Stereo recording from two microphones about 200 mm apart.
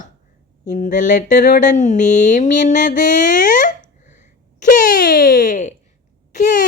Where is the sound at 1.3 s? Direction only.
45° left (ahead or behind).